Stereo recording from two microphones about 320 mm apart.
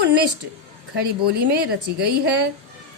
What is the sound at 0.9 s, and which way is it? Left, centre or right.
A woman's voice, right.